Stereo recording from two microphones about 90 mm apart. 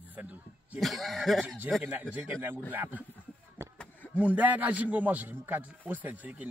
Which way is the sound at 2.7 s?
20° right (ahead or behind).